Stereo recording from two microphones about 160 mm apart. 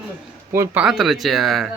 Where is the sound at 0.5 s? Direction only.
15° right (ahead or behind).